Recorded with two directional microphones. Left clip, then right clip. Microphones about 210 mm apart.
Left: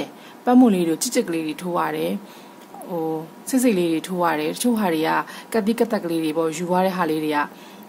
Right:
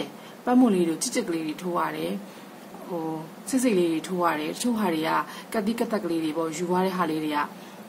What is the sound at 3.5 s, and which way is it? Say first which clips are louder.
A woman's voice: left 4 dB; 45° left (ahead or behind).